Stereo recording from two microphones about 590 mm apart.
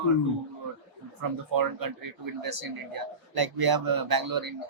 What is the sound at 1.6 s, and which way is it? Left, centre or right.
Speech, right.